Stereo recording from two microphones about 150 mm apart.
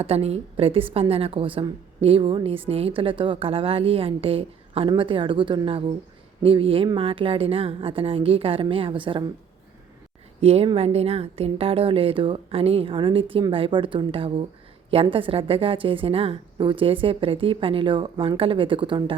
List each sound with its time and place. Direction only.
0.0 s a woman's voice: 40° right (ahead or behind)
10.4 s a woman's voice: 45° right (ahead or behind)